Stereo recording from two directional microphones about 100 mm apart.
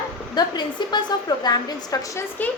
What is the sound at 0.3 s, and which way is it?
Speech, 45° left (ahead or behind).